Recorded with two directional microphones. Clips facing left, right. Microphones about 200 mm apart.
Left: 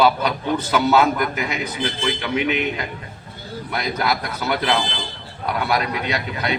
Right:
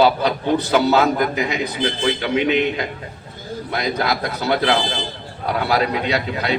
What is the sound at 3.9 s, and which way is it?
A man's voice, 30° right (ahead or behind).